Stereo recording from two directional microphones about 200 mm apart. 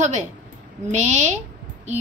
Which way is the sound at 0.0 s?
35° right (ahead or behind).